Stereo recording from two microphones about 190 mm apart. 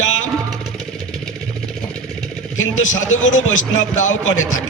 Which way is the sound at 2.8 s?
90° left.